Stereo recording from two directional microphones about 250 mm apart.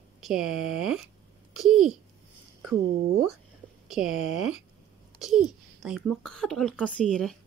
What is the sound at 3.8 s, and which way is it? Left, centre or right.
A child's voice, centre.